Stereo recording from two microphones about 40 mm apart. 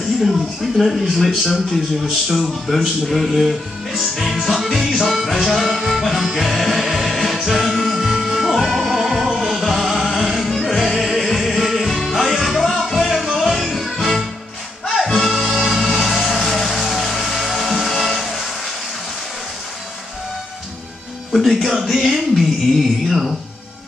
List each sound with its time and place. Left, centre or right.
0.2 s speech: centre
4.0 s music: centre
4.3 s music: centre
21.3 s a sound: centre
23.0 s music: centre